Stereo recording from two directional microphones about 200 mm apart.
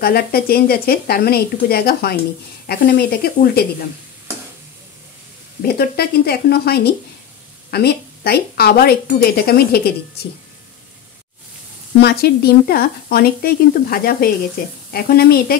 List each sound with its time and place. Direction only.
0.0 s a woman's voice: 50° left (ahead or behind)
5.8 s a woman's voice: 50° left (ahead or behind)
12.0 s a woman's voice: 55° left (ahead or behind)